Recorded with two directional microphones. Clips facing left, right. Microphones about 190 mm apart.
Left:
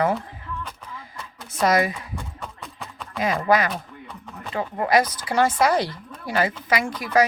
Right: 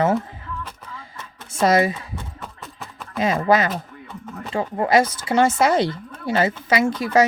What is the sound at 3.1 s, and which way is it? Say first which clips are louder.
Speech: right 2 dB; 25° right (ahead or behind).